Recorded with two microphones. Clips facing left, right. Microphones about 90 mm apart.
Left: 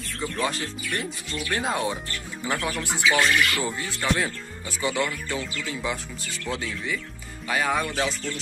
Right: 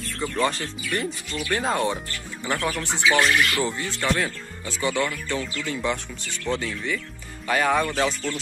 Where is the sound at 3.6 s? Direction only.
10° left (ahead or behind).